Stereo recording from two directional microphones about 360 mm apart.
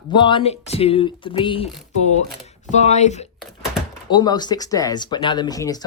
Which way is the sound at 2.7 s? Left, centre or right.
Centre.